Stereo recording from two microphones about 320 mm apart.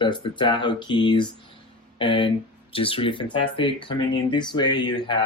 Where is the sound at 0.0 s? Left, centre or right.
Centre.